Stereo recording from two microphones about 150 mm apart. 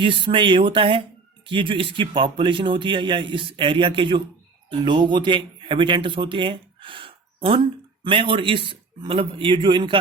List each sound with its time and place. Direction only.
0.0 s a man's voice: 35° right (ahead or behind)